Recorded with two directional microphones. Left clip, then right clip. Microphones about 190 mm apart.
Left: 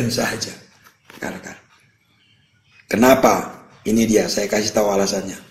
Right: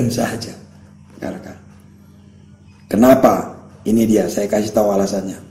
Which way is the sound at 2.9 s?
50° left (ahead or behind).